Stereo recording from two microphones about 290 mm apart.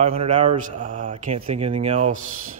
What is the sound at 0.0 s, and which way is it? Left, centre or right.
Speech, right.